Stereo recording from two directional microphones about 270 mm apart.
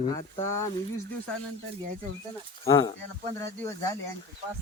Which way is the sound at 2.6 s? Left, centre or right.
Centre.